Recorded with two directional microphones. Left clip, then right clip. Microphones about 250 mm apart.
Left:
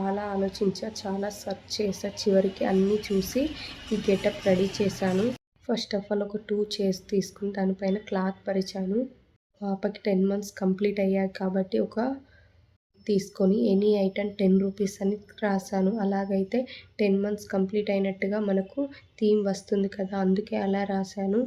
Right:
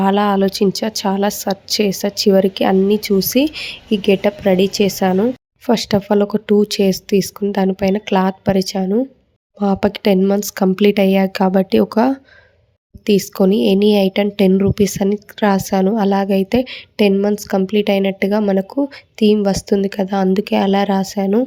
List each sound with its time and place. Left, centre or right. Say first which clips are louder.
0.0 s speech: right 14 dB; right